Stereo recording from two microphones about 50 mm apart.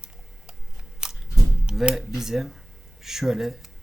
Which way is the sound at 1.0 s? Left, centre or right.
Centre.